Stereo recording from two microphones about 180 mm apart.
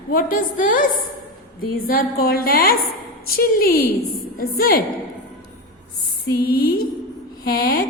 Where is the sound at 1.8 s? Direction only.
55° left (ahead or behind).